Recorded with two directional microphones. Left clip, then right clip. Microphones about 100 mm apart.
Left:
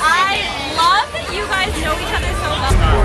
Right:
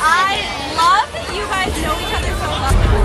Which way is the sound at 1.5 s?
15° left (ahead or behind).